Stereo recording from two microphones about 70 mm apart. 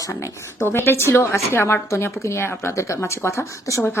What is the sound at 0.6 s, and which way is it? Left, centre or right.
A woman's voice, left.